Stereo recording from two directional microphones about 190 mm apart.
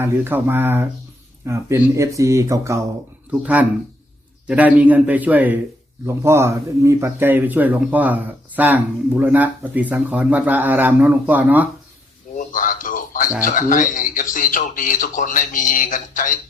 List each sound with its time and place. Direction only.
0.0 s speech: 10° right (ahead or behind)
12.4 s a sound: 45° left (ahead or behind)
13.4 s speech: 45° left (ahead or behind)